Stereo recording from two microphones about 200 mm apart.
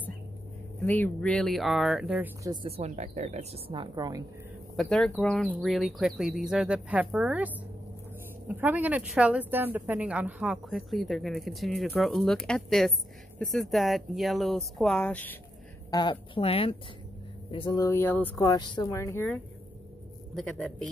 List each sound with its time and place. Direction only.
0.7 s speech: 10° left (ahead or behind); by 2.5 s 10° right (ahead or behind)
2.5 s a woman's voice: 30° right (ahead or behind)
4.7 s speech: 5° left (ahead or behind)
15.9 s speech: 25° left (ahead or behind)
18.4 s speech: 20° left (ahead or behind); by 20.6 s centre (ahead or behind)